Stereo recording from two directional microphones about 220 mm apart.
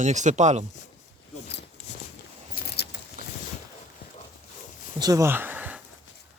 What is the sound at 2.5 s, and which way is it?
Keys jangling, 45° left (ahead or behind).